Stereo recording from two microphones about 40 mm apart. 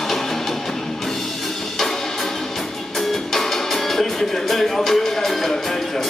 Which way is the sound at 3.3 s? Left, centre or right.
Centre.